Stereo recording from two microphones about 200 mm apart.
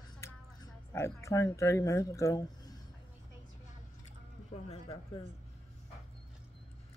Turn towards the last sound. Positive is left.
turn(degrees=25)  # may be behind; listen again after turning